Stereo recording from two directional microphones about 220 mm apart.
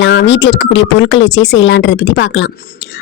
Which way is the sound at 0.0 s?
55° left (ahead or behind).